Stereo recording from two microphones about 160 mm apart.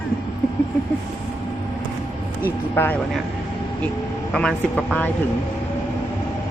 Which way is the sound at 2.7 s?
15° left (ahead or behind).